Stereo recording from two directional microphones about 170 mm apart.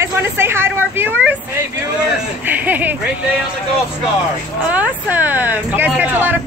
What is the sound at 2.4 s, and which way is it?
Speech, 10° right (ahead or behind).